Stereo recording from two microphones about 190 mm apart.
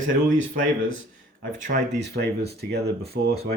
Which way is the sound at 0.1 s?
45° right (ahead or behind).